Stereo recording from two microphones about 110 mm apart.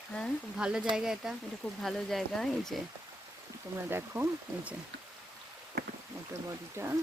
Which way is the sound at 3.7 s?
20° right (ahead or behind).